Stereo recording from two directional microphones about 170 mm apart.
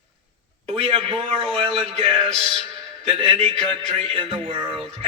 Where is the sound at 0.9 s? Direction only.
35° right (ahead or behind).